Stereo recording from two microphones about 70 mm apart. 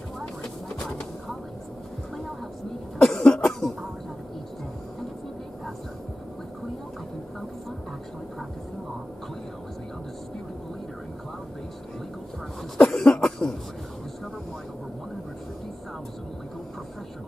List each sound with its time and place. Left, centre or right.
0.4 s a sound: centre
3.0 s cough: centre
12.7 s cough: centre